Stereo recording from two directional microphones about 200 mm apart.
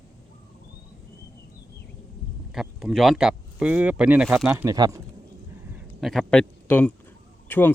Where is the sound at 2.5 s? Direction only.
Centre (ahead or behind); by 5.0 s 20° right (ahead or behind).